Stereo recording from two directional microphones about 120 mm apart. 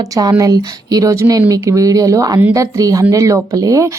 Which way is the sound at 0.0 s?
30° right (ahead or behind).